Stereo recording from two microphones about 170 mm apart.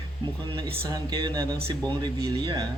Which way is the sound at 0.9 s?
25° right (ahead or behind).